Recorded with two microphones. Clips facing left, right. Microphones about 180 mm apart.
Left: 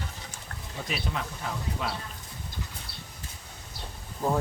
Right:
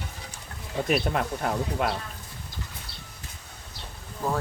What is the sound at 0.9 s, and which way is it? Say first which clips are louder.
Speech: right 8 dB; 55° right (ahead or behind).